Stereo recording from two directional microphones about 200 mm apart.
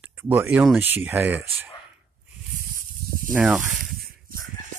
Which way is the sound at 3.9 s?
50° right (ahead or behind).